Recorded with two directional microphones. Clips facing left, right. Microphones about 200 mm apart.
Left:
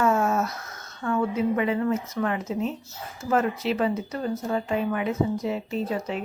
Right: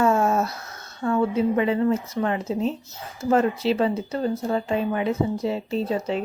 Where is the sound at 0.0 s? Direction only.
30° right (ahead or behind).